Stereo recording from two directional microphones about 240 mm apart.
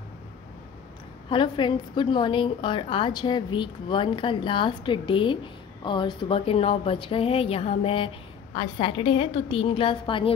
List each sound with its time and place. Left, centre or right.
1.3 s a woman's voice: centre